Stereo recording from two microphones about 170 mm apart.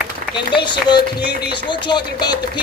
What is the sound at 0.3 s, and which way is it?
Speech, 30° left (ahead or behind).